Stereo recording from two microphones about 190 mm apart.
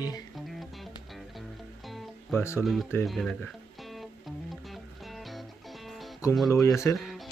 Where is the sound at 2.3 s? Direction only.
15° left (ahead or behind).